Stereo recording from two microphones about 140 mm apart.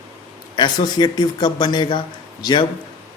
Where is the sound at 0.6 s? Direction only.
30° left (ahead or behind).